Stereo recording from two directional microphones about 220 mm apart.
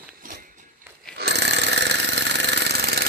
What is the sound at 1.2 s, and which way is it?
Jackhammer, 50° right (ahead or behind).